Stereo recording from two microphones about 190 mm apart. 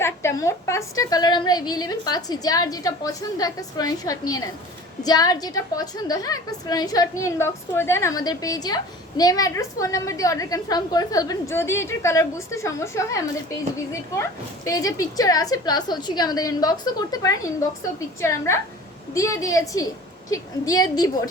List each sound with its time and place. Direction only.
0.0 s a woman's voice: 15° left (ahead or behind)